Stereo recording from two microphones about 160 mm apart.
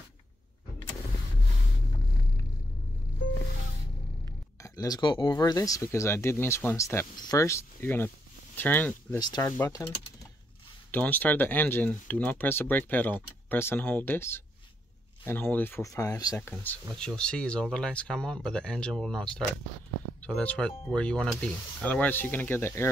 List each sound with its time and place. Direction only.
4.6 s speech: 25° left (ahead or behind)
9.2 s speech: 20° left (ahead or behind)
10.9 s speech: 10° left (ahead or behind)
16.3 s speech: 10° left (ahead or behind)